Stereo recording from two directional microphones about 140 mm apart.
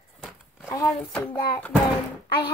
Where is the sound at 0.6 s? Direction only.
25° left (ahead or behind).